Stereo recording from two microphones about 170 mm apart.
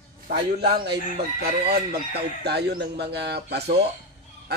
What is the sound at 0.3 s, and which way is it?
Speech, 70° right (ahead or behind).